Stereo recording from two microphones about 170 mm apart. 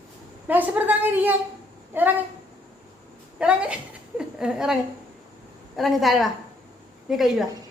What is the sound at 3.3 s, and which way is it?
A woman's voice, 5° right (ahead or behind).